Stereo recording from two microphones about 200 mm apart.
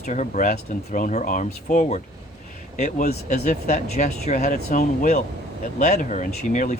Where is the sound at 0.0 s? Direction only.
35° left (ahead or behind).